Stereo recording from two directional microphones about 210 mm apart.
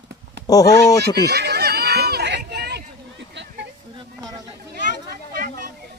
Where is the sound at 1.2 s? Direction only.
50° right (ahead or behind).